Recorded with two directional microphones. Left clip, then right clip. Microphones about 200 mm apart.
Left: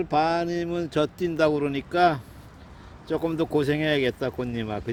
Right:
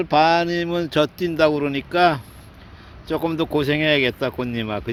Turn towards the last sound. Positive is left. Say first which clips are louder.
# right 5 dB
turn(degrees=-5)  # may be behind; listen again after turning